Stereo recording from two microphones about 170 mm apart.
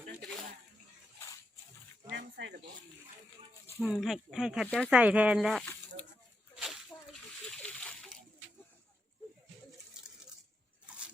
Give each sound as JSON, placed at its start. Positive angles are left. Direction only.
{"t": 2.0, "sound": "snake", "side_deg": -85}
{"t": 3.8, "sound": "speech", "side_deg": 10}
{"t": 4.0, "sound": "speech", "side_deg": 0}
{"t": 6.6, "sound": "slosh", "side_deg": 0}